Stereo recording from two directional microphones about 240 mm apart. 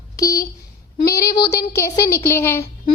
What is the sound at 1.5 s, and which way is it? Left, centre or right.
Speech, centre.